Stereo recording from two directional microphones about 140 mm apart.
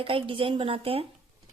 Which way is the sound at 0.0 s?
40° right (ahead or behind).